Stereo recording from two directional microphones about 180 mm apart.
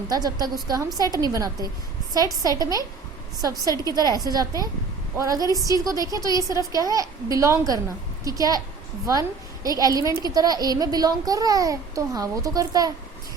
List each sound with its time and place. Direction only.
0.1 s a child's voice: 20° right (ahead or behind)
9.6 s a child's voice: 20° right (ahead or behind)